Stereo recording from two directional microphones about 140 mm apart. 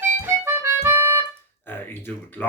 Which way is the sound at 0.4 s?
15° right (ahead or behind).